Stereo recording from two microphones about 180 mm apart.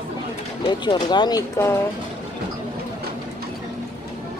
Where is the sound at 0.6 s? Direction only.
25° left (ahead or behind).